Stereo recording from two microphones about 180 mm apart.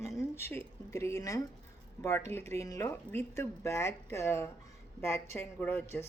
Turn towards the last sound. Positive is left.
turn(degrees=15)  # may be behind; listen again after turning